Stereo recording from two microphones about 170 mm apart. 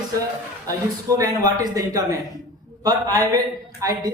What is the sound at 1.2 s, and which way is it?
Speech, 20° right (ahead or behind).